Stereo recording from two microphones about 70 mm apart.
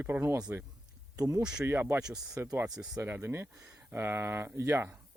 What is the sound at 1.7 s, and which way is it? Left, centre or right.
Speech, right.